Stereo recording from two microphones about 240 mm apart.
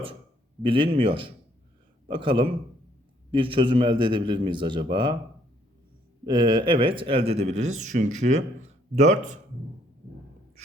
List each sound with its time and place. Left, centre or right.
0.6 s speech: right
6.2 s speech: centre